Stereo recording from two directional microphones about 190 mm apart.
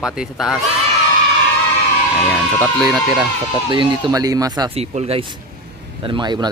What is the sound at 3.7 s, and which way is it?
Speech, 20° right (ahead or behind).